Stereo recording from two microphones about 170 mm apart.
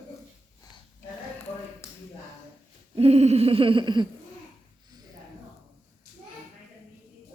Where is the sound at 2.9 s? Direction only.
35° right (ahead or behind).